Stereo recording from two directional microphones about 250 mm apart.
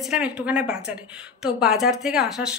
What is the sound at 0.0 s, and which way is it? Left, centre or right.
A woman's voice, centre.